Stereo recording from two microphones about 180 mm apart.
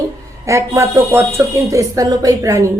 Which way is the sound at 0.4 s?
15° right (ahead or behind).